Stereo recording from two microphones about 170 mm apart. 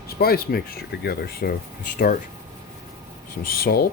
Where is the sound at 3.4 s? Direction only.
65° left (ahead or behind).